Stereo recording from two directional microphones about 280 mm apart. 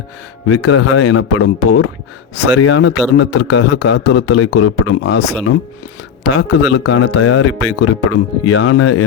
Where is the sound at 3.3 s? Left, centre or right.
Left.